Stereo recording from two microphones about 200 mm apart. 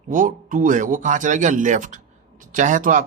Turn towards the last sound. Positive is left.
turn(degrees=-40)  # may be behind; listen again after turning